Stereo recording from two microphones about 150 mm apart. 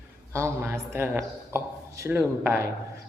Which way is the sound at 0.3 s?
15° right (ahead or behind).